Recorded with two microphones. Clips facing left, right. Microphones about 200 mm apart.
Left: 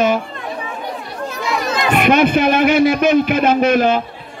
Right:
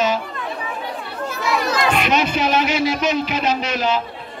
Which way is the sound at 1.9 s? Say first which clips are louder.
Left 6 dB; 55° left (ahead or behind).